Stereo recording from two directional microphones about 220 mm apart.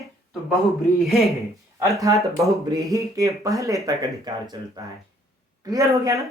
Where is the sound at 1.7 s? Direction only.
15° right (ahead or behind).